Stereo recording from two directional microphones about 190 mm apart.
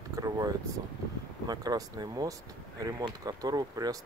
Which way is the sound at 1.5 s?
20° right (ahead or behind).